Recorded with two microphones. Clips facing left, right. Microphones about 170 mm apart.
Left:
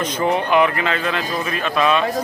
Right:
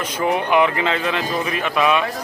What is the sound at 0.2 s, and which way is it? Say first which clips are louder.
Speech: even; 10° right (ahead or behind).